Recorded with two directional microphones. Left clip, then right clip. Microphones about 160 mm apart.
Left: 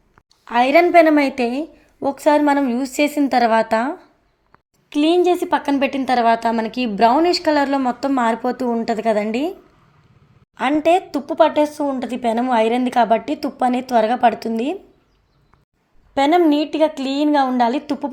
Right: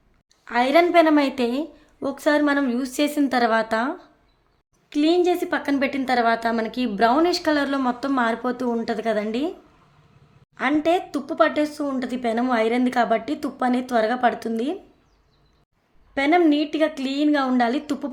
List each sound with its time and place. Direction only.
0.4 s a woman's voice: 15° left (ahead or behind)
16.1 s a woman's voice: 20° left (ahead or behind)